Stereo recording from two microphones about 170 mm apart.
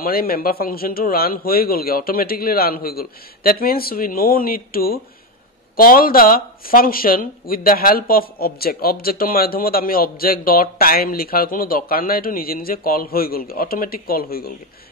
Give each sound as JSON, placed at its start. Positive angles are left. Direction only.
{"t": 0.0, "sound": "speech", "side_deg": 60}